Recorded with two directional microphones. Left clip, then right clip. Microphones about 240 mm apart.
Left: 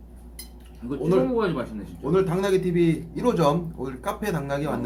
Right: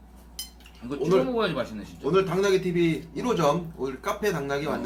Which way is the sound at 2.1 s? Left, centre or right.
Left.